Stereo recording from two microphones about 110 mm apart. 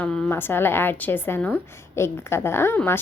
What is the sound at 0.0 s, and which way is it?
Speech, 5° left (ahead or behind).